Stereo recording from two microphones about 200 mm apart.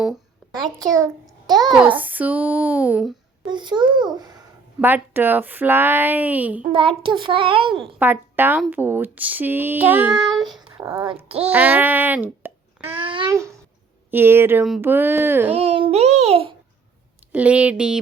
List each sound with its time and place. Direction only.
0.8 s speech: 15° right (ahead or behind)
3.4 s a child's voice: 25° right (ahead or behind)
4.8 s speech: 10° right (ahead or behind)
6.7 s a child's voice: 25° right (ahead or behind)
7.8 s speech: 10° right (ahead or behind)
10.2 s child singing: centre (ahead or behind)
10.9 s a child's voice: 25° right (ahead or behind)
11.3 s a child's voice: 10° right (ahead or behind)
13.0 s a child's voice: 25° right (ahead or behind)
15.5 s a child's voice: 30° right (ahead or behind)
17.3 s speech: 5° right (ahead or behind)